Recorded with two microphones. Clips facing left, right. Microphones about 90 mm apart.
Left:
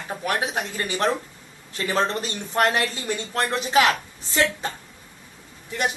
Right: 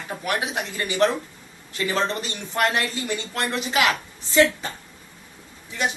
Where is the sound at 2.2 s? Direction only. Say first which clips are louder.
Left 2 dB; 40° left (ahead or behind).